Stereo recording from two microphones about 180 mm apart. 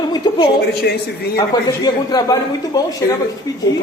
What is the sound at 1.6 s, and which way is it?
A woman's voice, 20° left (ahead or behind).